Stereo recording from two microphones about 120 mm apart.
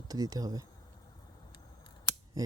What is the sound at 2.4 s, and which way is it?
Speech, 30° right (ahead or behind).